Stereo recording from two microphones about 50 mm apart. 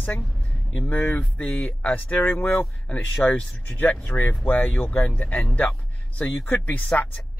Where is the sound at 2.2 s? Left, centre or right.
Left.